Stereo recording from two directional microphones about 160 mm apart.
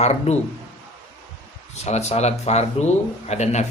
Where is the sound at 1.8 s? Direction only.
45° left (ahead or behind).